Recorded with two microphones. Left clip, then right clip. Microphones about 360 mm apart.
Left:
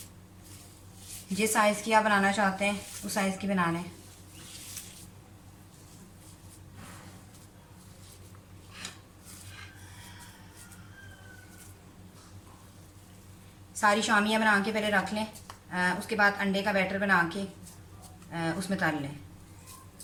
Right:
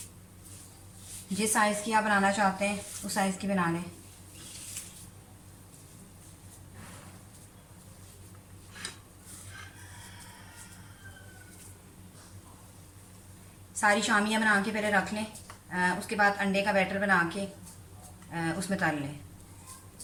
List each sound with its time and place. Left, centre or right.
1.4 s a woman's voice: centre
13.7 s a woman's voice: centre